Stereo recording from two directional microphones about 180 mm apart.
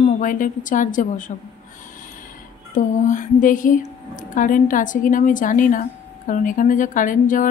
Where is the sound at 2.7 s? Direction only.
45° left (ahead or behind).